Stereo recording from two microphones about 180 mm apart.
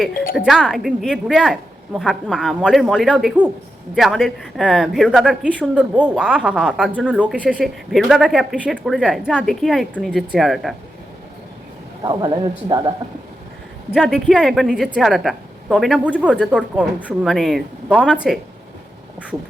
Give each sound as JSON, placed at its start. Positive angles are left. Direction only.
{"t": 0.3, "sound": "a woman's voice", "side_deg": 0}
{"t": 12.0, "sound": "speech", "side_deg": -25}
{"t": 13.9, "sound": "a woman's voice", "side_deg": 0}